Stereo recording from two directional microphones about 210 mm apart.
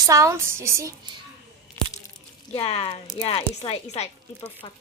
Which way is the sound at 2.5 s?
30° left (ahead or behind).